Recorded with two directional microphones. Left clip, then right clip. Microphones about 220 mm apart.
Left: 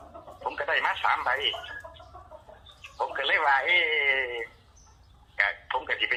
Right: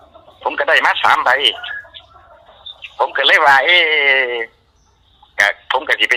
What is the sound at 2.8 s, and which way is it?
A man's voice, 50° right (ahead or behind).